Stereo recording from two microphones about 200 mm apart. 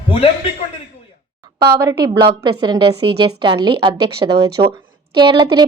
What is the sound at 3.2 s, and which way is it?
Speech, 25° right (ahead or behind).